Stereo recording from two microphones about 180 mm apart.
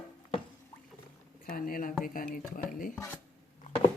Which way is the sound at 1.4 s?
50° left (ahead or behind).